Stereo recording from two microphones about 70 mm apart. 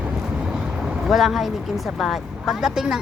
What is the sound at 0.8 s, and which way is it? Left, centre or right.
Speech, centre.